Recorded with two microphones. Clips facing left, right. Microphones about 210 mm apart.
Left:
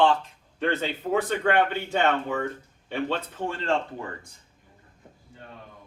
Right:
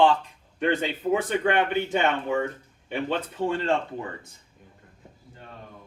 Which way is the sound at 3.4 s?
15° right (ahead or behind).